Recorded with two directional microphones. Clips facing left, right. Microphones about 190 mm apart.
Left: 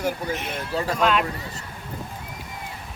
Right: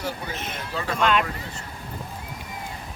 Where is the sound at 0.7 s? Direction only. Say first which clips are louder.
Left 4 dB; 40° left (ahead or behind).